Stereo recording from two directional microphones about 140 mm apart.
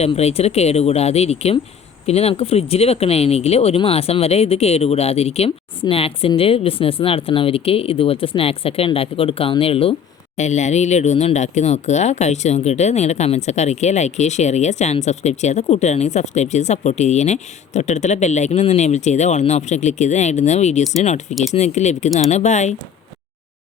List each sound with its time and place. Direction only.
0.0 s speech: 50° left (ahead or behind)
10.3 s speech: 55° left (ahead or behind)